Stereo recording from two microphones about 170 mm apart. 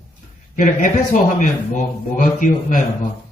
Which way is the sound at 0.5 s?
50° left (ahead or behind).